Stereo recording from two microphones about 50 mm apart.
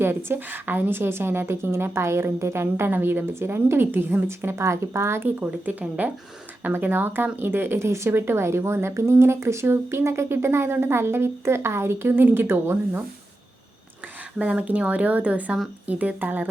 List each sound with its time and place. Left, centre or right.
0.0 s a woman's voice: right
2.9 s a woman's voice: right
5.7 s a woman's voice: right
8.1 s speech: right
14.3 s speech: right